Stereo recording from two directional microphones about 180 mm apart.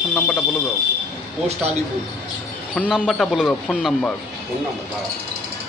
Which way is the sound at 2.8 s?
Centre (ahead or behind).